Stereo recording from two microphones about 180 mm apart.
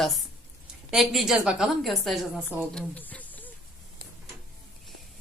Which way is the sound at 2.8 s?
10° left (ahead or behind).